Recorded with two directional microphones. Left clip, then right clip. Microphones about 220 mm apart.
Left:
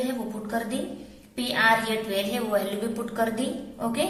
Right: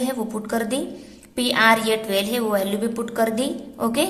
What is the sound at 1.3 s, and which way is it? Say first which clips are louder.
A woman's voice: right 5 dB; 40° right (ahead or behind).